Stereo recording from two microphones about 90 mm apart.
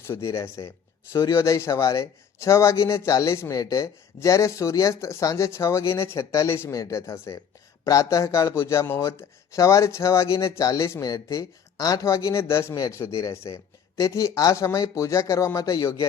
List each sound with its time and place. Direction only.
0.1 s speech: 35° left (ahead or behind)
3.5 s speech: 45° left (ahead or behind)